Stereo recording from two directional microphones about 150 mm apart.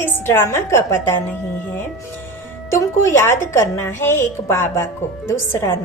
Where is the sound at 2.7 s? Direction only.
15° left (ahead or behind).